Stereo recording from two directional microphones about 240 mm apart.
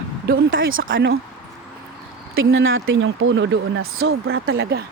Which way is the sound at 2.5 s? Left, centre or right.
Right.